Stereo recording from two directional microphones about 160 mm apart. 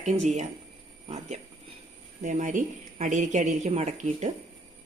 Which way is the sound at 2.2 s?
50° right (ahead or behind).